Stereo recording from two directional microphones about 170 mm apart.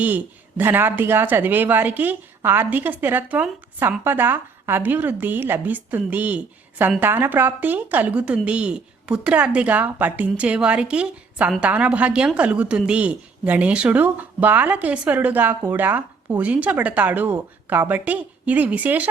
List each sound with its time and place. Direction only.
0.6 s a woman's voice: 10° right (ahead or behind)